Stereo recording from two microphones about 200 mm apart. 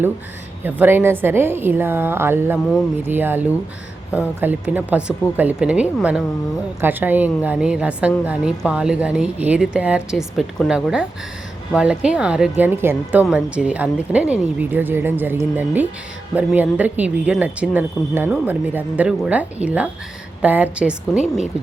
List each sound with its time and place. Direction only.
0.6 s a woman's voice: 10° right (ahead or behind)
21.2 s speech: 35° left (ahead or behind)